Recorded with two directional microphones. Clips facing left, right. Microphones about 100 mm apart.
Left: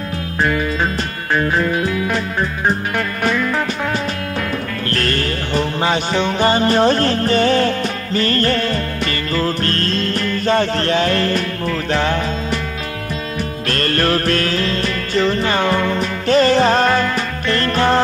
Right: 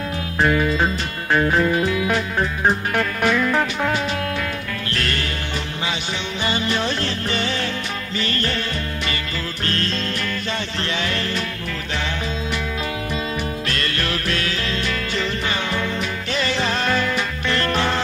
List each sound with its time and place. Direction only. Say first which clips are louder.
4.8 s music: left 6 dB; 45° left (ahead or behind)
13.7 s music: left 7 dB; 45° left (ahead or behind)